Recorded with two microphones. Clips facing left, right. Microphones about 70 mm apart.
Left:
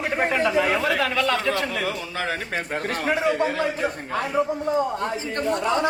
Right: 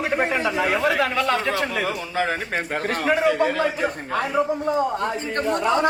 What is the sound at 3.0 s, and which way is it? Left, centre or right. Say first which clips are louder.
A man's voice: right 3 dB; right.